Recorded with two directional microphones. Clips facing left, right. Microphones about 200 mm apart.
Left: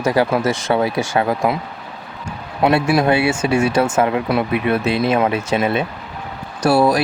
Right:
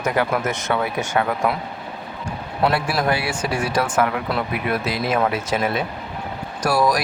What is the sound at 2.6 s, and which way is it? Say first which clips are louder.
Speech: left 6 dB; 20° left (ahead or behind).